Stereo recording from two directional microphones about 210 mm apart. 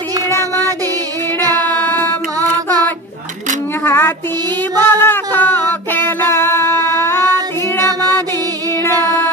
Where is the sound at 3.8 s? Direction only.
10° left (ahead or behind).